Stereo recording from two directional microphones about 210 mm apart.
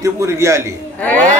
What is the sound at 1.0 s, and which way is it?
Speech, 5° left (ahead or behind).